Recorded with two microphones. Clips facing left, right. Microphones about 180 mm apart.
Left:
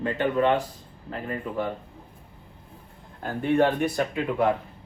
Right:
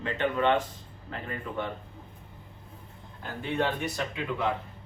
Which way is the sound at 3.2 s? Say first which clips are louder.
Left 8 dB; 50° left (ahead or behind).